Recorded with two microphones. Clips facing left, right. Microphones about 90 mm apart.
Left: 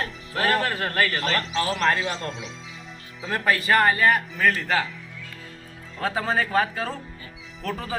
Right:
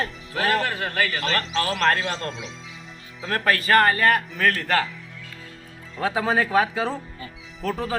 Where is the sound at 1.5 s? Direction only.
10° left (ahead or behind).